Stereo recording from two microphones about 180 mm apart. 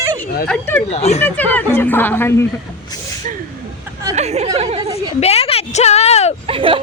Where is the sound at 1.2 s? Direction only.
10° left (ahead or behind).